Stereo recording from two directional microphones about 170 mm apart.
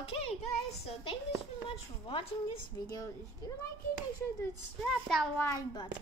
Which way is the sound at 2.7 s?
20° left (ahead or behind).